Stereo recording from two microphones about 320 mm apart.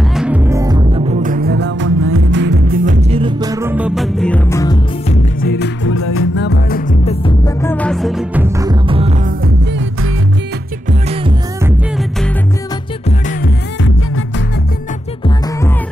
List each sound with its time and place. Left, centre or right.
0.1 s music: centre
5.1 s music: left; by 9.3 s centre
10.9 s music: centre